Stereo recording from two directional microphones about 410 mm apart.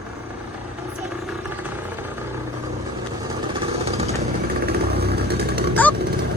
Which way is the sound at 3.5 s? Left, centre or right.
Centre.